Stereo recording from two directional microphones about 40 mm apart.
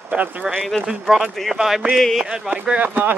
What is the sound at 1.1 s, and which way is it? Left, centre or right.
Speech, centre.